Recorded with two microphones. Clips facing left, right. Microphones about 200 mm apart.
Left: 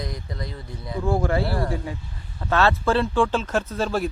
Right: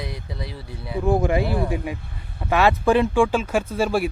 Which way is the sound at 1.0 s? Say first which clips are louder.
Right 3 dB; 15° right (ahead or behind).